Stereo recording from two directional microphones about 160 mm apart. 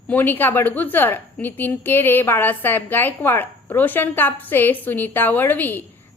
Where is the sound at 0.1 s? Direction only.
10° left (ahead or behind).